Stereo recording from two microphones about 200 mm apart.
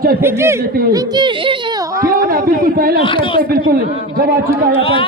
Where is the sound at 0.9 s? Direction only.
20° right (ahead or behind).